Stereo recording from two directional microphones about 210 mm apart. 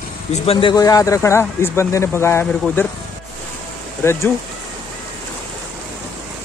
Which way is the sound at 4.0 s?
10° left (ahead or behind).